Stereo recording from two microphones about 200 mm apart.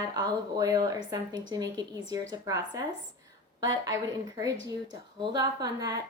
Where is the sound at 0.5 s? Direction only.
15° right (ahead or behind).